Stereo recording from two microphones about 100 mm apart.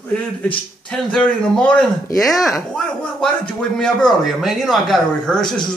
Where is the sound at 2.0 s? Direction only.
35° left (ahead or behind).